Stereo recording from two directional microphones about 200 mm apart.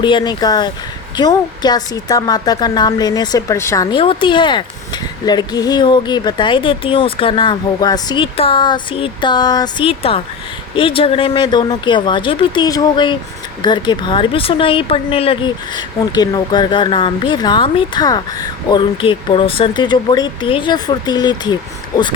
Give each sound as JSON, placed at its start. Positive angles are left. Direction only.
{"t": 0.0, "sound": "speech", "side_deg": 25}
{"t": 3.9, "sound": "speech", "side_deg": 25}